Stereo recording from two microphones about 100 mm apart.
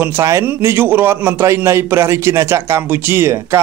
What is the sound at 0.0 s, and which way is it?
A man's voice, 30° right (ahead or behind).